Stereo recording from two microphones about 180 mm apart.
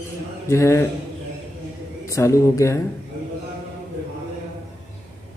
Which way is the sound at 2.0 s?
15° left (ahead or behind).